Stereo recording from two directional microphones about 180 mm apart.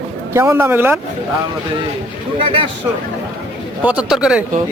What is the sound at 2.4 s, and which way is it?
Speech, 30° right (ahead or behind).